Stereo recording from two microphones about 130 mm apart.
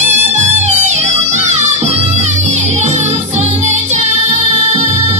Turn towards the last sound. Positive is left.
turn(degrees=-60)  # may be behind; listen again after turning